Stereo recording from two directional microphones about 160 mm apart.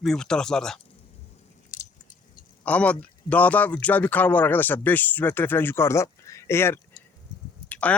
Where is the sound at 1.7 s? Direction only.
55° left (ahead or behind).